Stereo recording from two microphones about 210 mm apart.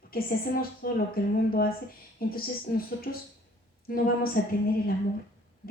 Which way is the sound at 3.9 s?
45° left (ahead or behind).